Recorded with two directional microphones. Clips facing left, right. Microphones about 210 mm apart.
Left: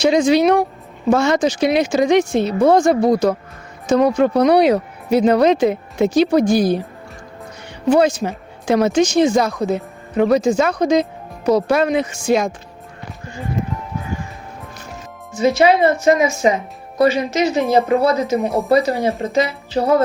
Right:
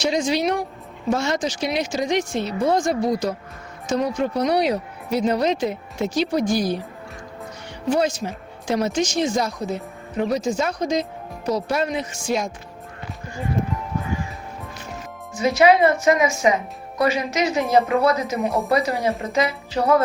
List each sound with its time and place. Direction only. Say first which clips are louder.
0.0 s speech: left 8 dB; 60° left (ahead or behind)
7.9 s speech: left 7 dB; 60° left (ahead or behind)
15.4 s speech: left 2 dB; 30° left (ahead or behind)
18.4 s speech: left 3 dB; centre (ahead or behind)
19.2 s speech: left 4 dB; 30° left (ahead or behind)